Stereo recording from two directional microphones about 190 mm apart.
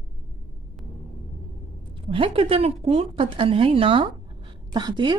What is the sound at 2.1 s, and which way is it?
Speech, 30° right (ahead or behind).